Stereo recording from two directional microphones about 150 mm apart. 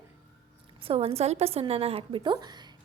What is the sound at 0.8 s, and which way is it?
A woman's voice, 40° right (ahead or behind).